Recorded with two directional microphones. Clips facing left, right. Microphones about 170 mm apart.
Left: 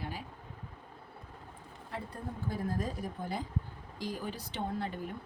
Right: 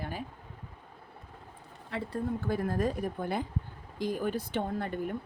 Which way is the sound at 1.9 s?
80° right.